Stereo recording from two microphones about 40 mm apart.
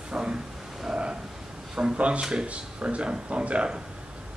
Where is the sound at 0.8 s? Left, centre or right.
Right.